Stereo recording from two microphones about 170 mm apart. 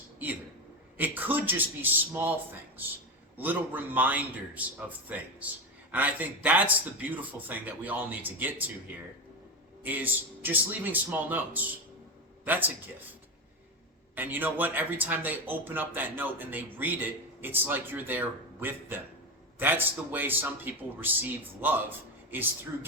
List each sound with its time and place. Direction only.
0.9 s a man's voice: 10° right (ahead or behind)
3.3 s a man's voice: 10° right (ahead or behind)
9.8 s a man's voice: 10° right (ahead or behind)
14.2 s a man's voice: 10° right (ahead or behind)